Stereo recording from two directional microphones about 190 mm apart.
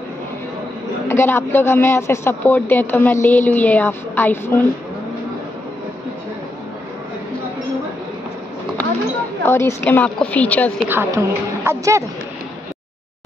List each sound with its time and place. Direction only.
1.0 s a man's voice: 10° left (ahead or behind)
9.4 s a man's voice: 15° left (ahead or behind)
10.9 s a woman's voice: 10° right (ahead or behind)